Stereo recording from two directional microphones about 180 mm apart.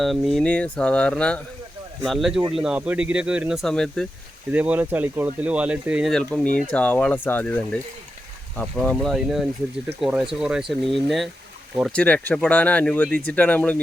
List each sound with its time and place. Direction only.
0.0 s speech: centre (ahead or behind)
4.5 s speech: 10° right (ahead or behind); by 13.8 s 5° left (ahead or behind)